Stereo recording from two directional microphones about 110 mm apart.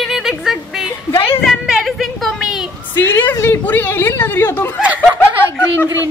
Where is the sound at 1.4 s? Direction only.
5° right (ahead or behind).